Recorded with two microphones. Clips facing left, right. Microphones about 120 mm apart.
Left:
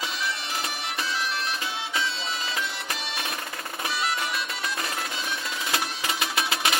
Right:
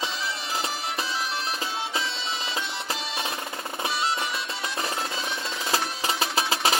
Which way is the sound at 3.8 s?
25° right (ahead or behind).